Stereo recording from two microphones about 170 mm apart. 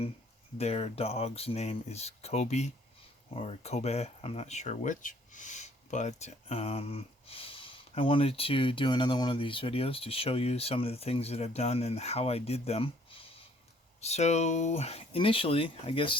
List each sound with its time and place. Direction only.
0.6 s speech: 35° left (ahead or behind)